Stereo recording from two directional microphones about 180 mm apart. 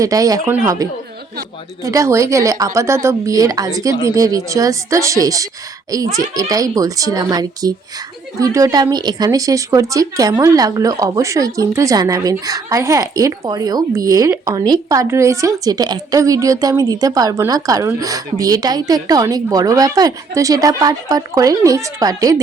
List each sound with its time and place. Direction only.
0.0 s speech: 20° right (ahead or behind)